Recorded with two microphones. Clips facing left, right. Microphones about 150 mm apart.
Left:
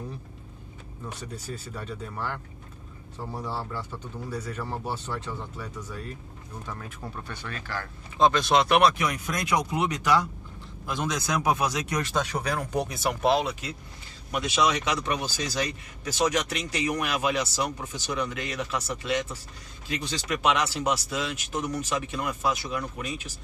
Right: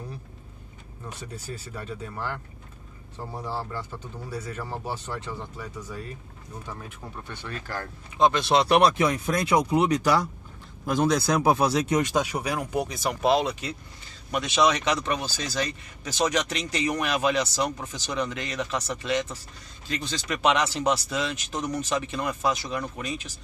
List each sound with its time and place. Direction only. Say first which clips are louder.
1.3 s speech: even; 10° right (ahead or behind)
3.3 s speech: right 1 dB; 10° right (ahead or behind)
8.2 s speech: even; 25° right (ahead or behind)
12.0 s speech: right 3 dB; 10° right (ahead or behind)
12.8 s speech: left 1 dB; 5° left (ahead or behind)